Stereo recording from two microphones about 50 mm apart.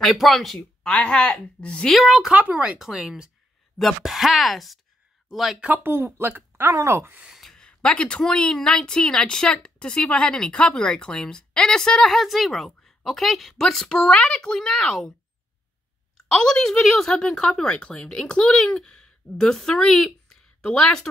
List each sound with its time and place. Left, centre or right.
0.0 s speech: centre
0.9 s a woman's voice: centre
1.9 s speech: centre
2.3 s speech: right
2.9 s speech: centre
5.7 s speech: right
6.7 s speech: right
7.6 s speech: left
16.2 s speech: centre